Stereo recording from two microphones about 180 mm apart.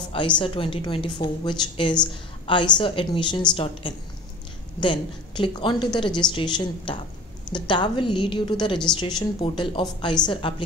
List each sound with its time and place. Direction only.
0.1 s a woman's voice: 25° left (ahead or behind)